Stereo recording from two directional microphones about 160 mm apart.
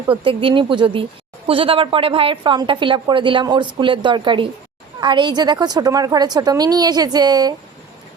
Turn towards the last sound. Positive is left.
turn(degrees=-25)  # may be behind; listen again after turning